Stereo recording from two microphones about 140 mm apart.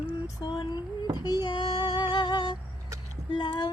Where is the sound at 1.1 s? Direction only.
30° left (ahead or behind).